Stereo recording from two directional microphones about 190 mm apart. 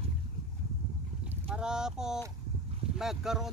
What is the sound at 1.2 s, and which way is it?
Speech, 5° right (ahead or behind).